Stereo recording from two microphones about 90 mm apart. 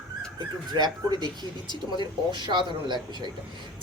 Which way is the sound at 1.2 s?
50° left (ahead or behind).